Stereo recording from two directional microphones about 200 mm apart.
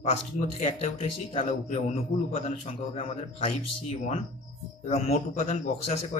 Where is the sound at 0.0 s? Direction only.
35° left (ahead or behind).